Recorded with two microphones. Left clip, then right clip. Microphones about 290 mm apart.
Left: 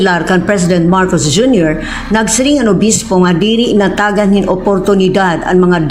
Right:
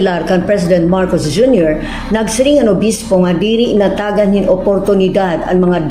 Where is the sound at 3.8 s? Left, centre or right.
Left.